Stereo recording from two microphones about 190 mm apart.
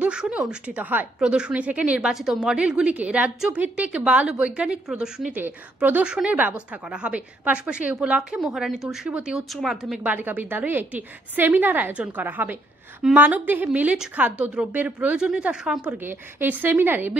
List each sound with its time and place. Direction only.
0.0 s speech: 5° right (ahead or behind)